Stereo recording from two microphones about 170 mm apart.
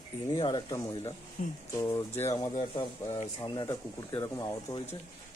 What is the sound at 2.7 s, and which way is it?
Speech, 30° left (ahead or behind).